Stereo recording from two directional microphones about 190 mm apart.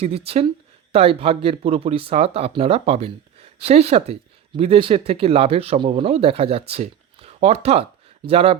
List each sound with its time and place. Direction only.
0.3 s speech: 30° right (ahead or behind)